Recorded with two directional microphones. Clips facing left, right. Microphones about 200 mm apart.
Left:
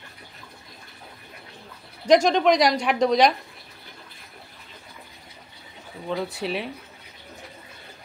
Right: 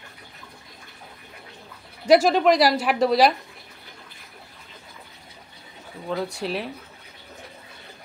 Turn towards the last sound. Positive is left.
turn(degrees=0)  # may be behind; listen again after turning